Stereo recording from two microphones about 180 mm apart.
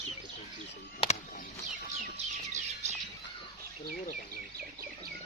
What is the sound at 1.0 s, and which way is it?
Bird, 40° left (ahead or behind).